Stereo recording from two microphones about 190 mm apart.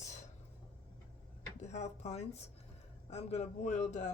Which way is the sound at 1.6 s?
35° left (ahead or behind).